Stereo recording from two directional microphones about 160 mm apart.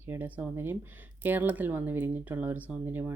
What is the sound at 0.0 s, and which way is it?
Speech, 15° right (ahead or behind).